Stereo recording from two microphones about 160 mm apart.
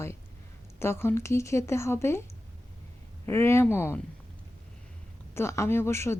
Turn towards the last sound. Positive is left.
turn(degrees=15)  # may be behind; listen again after turning